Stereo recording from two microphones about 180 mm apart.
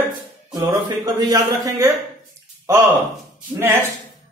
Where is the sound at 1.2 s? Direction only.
20° right (ahead or behind).